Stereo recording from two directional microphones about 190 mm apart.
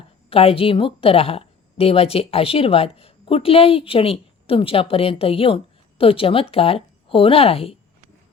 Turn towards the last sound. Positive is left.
turn(degrees=30)  # may be behind; listen again after turning